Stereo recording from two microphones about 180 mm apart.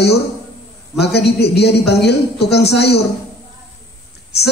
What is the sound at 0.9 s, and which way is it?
Speech, 65° left (ahead or behind).